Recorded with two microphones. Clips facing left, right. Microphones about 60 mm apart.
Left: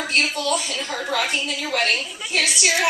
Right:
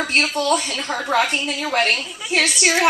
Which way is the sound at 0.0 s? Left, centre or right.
Right.